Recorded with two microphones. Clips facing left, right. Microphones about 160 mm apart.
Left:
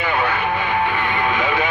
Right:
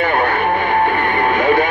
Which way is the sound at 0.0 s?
50° right (ahead or behind).